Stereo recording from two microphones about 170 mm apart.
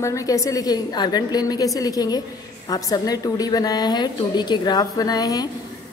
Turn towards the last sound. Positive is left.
turn(degrees=20)  # may be behind; listen again after turning